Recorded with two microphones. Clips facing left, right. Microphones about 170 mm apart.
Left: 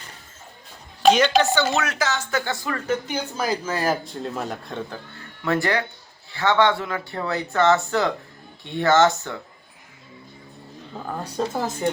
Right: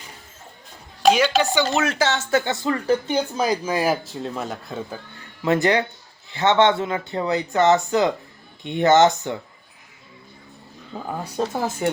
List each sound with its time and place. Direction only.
1.0 s speech: 5° right (ahead or behind)
1.7 s speech: 30° right (ahead or behind)
2.8 s speech: 35° right (ahead or behind)
3.3 s speech: 15° right (ahead or behind)
4.0 s speech: centre (ahead or behind)
5.5 s speech: 20° right (ahead or behind)
11.2 s speech: 5° right (ahead or behind)